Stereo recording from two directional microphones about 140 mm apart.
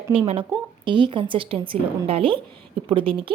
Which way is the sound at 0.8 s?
35° right (ahead or behind).